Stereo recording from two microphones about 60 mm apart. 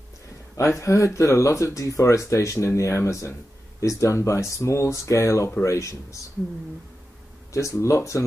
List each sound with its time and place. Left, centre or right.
0.6 s speech: left
7.5 s speech: left